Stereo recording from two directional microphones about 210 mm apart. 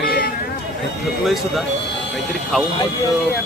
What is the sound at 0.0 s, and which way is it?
Vehicle, 45° left (ahead or behind).